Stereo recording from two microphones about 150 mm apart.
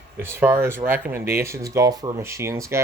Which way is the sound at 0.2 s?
15° right (ahead or behind).